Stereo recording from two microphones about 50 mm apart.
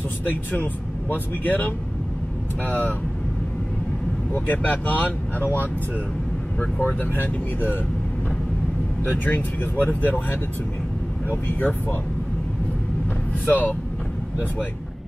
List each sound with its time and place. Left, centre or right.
0.2 s speech: left
4.3 s speech: left
9.0 s speech: left
11.4 s speech: left
13.5 s speech: left